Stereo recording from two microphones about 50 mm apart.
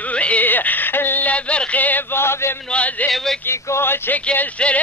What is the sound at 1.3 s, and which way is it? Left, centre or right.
Music, left.